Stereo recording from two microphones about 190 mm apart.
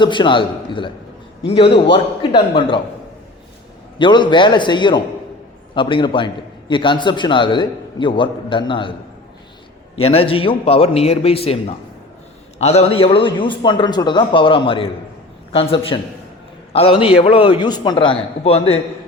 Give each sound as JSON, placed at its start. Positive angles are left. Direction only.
{"t": 0.0, "sound": "a man's voice", "side_deg": 25}
{"t": 3.9, "sound": "a man's voice", "side_deg": 25}
{"t": 10.0, "sound": "a man's voice", "side_deg": 30}